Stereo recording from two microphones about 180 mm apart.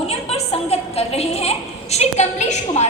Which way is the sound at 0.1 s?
35° left (ahead or behind).